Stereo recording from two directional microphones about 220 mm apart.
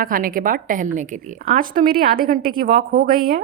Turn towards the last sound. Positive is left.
turn(degrees=-40)  # may be behind; listen again after turning